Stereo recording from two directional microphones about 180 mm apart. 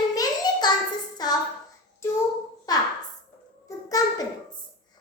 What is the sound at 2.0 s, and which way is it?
Child singing, 15° left (ahead or behind).